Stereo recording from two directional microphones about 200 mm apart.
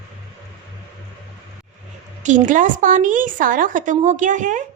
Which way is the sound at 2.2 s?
40° right (ahead or behind).